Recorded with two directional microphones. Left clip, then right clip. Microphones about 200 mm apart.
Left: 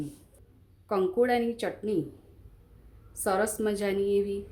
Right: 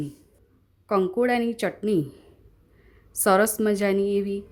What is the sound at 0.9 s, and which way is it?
Speech, 30° right (ahead or behind).